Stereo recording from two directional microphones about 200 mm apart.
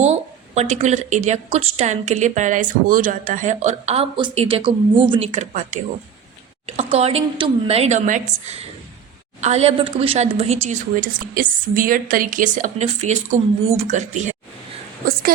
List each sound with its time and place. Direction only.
0.0 s a woman's voice: 35° right (ahead or behind)